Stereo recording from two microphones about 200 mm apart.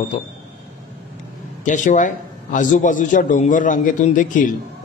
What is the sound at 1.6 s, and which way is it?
Speech, 40° left (ahead or behind).